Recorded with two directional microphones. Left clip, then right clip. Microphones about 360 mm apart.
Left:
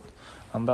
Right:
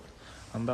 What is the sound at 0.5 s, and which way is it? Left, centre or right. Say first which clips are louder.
Speech: left 6 dB; centre.